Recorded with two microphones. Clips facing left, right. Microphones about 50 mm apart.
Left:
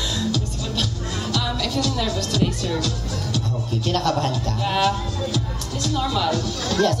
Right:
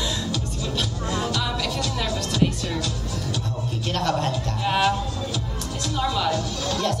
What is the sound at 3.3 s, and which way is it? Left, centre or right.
Speech, right.